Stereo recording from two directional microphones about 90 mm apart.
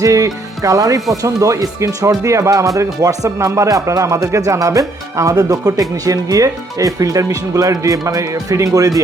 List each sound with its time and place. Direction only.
0.0 s music: 35° right (ahead or behind)
1.1 s speech: 40° right (ahead or behind)